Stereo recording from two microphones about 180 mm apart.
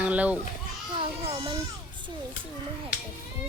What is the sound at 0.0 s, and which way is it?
Speech, 10° right (ahead or behind).